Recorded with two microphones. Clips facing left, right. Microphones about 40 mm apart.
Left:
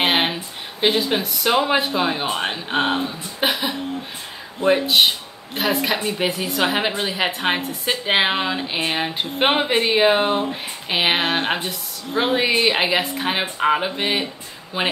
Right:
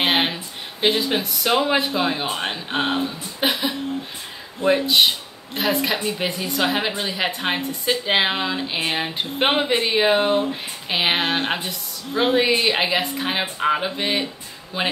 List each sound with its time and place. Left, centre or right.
0.0 s a woman's voice: centre